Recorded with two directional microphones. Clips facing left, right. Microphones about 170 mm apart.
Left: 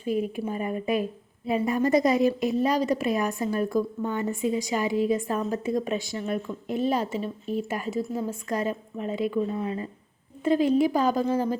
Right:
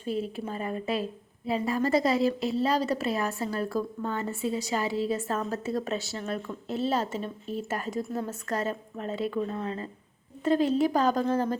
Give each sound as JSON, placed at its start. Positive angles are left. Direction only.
{"t": 0.0, "sound": "a woman's voice", "side_deg": 15}